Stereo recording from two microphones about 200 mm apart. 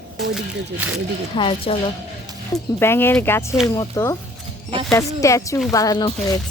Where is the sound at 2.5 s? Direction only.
10° left (ahead or behind).